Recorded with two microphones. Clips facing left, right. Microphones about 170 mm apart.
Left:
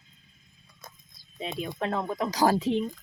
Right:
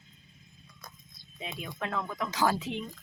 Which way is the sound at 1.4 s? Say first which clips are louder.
Left 6 dB; 30° left (ahead or behind).